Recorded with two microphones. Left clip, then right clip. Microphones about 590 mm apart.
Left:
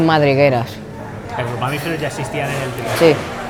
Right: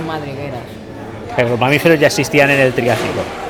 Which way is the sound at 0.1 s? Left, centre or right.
Left.